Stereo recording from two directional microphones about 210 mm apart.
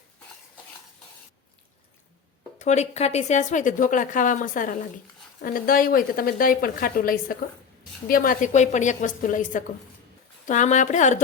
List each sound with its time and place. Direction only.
2.6 s a woman's voice: 35° left (ahead or behind)